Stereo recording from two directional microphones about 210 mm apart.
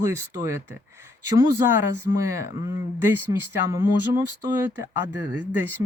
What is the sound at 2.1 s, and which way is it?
Speech, 15° right (ahead or behind).